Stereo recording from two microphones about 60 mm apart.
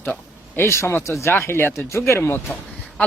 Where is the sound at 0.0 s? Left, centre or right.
Left.